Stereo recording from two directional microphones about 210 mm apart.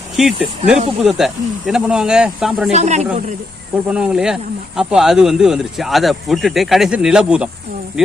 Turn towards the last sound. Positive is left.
turn(degrees=-5)  # may be behind; listen again after turning